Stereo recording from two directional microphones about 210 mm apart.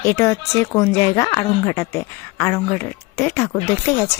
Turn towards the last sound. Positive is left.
turn(degrees=15)  # may be behind; listen again after turning